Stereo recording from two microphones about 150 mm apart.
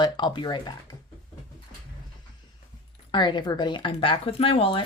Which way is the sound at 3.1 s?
30° left (ahead or behind).